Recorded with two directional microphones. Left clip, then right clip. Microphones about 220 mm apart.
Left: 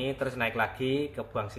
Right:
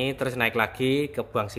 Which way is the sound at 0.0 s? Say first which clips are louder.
Right 5 dB; 45° right (ahead or behind).